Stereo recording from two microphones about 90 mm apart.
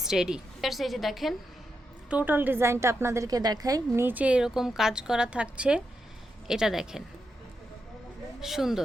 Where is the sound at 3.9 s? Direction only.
20° right (ahead or behind).